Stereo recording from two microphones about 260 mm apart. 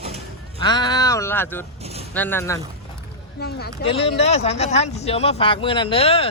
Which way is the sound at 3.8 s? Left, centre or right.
Left.